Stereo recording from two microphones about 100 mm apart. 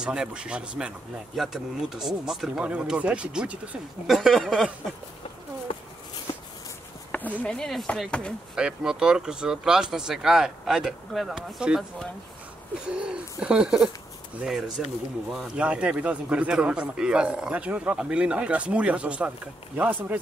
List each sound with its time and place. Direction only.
0.0 s speech: 10° right (ahead or behind)
4.1 s speech: centre (ahead or behind)
7.1 s a sound: 15° left (ahead or behind)
7.4 s speech: 5° left (ahead or behind)
8.5 s speech: 10° right (ahead or behind)
12.8 s speech: 10° right (ahead or behind)